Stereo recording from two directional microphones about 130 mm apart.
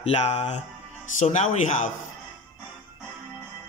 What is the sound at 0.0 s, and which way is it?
Speech, 50° left (ahead or behind).